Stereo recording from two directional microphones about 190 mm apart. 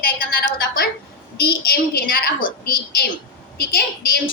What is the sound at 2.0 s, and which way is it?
A woman's voice, 50° left (ahead or behind).